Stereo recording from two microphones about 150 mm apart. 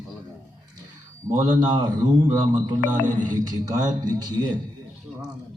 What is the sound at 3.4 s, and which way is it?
A man's voice, 25° right (ahead or behind).